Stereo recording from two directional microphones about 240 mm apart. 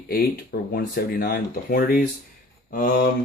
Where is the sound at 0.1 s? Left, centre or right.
Left.